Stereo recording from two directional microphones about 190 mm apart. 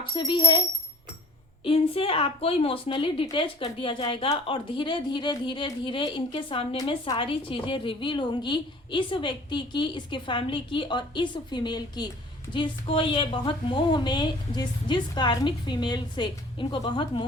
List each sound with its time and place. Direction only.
0.1 s a woman's voice: 25° left (ahead or behind)
1.6 s a woman's voice: 30° left (ahead or behind)